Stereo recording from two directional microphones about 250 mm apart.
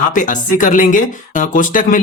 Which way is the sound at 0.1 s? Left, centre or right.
Left.